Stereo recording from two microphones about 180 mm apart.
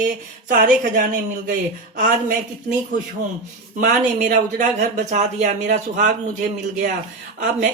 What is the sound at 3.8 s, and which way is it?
Speech, 45° right (ahead or behind).